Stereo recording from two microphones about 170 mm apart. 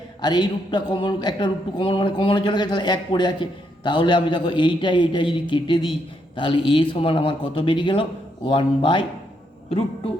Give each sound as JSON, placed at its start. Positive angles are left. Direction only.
{"t": 0.2, "sound": "a man's voice", "side_deg": 25}